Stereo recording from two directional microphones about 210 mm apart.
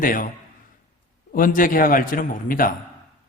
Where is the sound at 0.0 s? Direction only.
40° left (ahead or behind).